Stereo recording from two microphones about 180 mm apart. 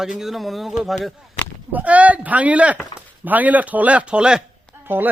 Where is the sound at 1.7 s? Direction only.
10° right (ahead or behind).